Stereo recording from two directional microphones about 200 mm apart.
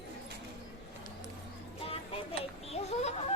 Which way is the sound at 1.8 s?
30° left (ahead or behind).